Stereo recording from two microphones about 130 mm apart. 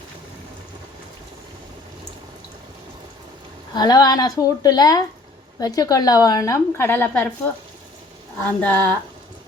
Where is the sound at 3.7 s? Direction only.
30° left (ahead or behind); by 7.3 s 15° left (ahead or behind).